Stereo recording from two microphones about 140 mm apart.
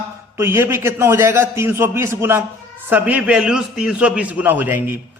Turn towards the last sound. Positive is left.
turn(degrees=-15)  # may be behind; listen again after turning